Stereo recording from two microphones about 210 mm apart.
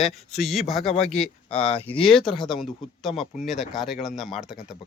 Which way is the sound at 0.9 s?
30° left (ahead or behind).